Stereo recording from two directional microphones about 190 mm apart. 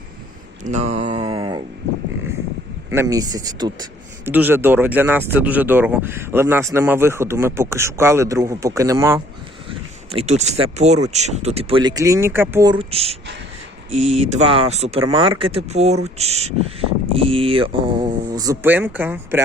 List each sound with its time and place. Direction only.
0.6 s speech: 35° right (ahead or behind)
1.2 s a sound: 25° right (ahead or behind)
2.9 s speech: 15° right (ahead or behind)
10.1 s speech: 35° right (ahead or behind); by 12.8 s 15° right (ahead or behind)
12.8 s speech: 30° right (ahead or behind); by 19.4 s 10° right (ahead or behind)